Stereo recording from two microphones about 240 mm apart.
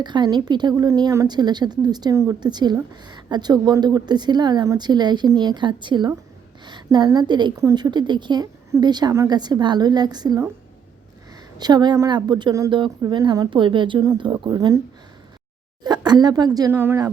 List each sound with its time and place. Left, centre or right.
0.0 s a woman's voice: centre
11.5 s a woman's voice: centre
15.8 s a woman's voice: centre